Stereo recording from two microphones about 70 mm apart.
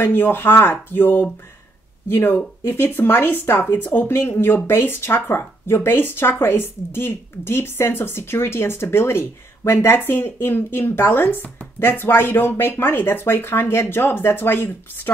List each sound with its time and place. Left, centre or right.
0.0 s speech: left